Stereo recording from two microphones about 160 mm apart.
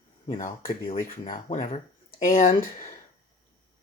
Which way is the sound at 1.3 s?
55° left (ahead or behind).